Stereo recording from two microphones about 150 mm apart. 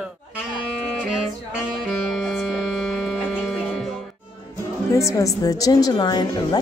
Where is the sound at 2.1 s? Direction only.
Centre (ahead or behind).